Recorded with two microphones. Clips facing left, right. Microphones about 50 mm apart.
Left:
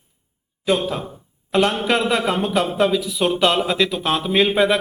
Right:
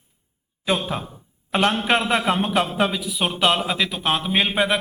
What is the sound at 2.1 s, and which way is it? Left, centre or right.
Speech, right.